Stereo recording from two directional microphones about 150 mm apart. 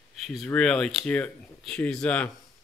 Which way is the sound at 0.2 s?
Centre (ahead or behind).